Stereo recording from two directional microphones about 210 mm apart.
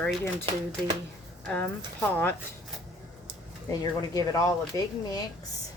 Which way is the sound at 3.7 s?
15° left (ahead or behind).